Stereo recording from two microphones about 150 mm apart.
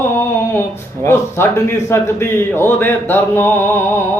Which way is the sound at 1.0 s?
15° left (ahead or behind).